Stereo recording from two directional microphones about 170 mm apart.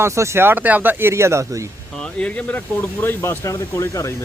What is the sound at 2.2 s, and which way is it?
Speech, 10° left (ahead or behind).